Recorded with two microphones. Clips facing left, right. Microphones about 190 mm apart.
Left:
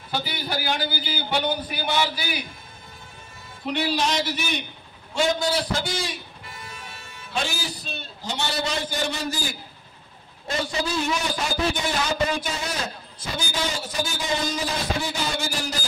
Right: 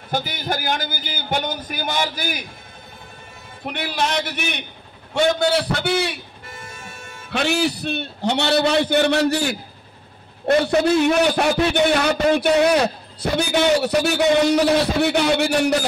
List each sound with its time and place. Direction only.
0.1 s a man's voice: 45° right (ahead or behind)
3.6 s a man's voice: 55° right (ahead or behind)
6.5 s music: 45° right (ahead or behind)
7.3 s a man's voice: 65° right (ahead or behind)